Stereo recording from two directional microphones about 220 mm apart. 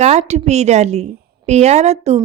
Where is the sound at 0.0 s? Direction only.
30° right (ahead or behind).